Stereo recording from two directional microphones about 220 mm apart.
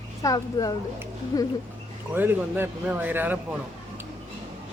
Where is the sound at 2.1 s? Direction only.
10° right (ahead or behind).